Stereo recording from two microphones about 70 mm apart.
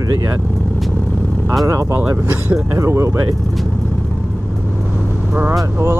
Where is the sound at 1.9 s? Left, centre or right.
Right.